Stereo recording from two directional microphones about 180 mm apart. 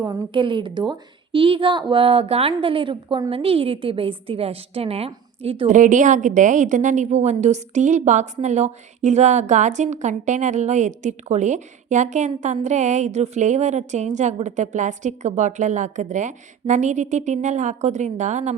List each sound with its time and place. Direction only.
0.0 s a woman's voice: 25° right (ahead or behind); by 18.5 s 40° right (ahead or behind)